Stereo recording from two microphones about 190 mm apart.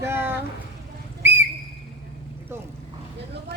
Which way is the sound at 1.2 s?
10° right (ahead or behind).